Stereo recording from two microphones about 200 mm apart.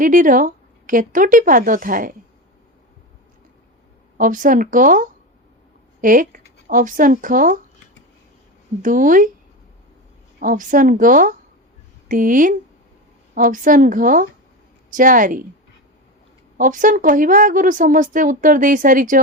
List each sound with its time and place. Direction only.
0.0 s speech: 40° right (ahead or behind)
4.2 s speech: 40° right (ahead or behind)
8.8 s speech: 40° right (ahead or behind)
10.4 s a woman's voice: 40° right (ahead or behind)
16.6 s speech: 40° right (ahead or behind)